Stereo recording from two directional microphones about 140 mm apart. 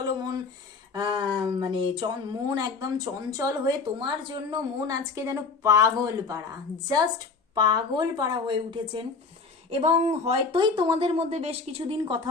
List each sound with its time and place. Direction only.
0.0 s a sound: 30° right (ahead or behind)
0.9 s a woman's voice: 30° right (ahead or behind)
9.6 s speech: 50° right (ahead or behind)
10.5 s a woman's voice: 35° right (ahead or behind)